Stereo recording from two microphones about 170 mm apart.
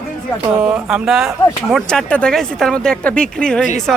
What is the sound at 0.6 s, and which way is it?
Speech, 5° right (ahead or behind).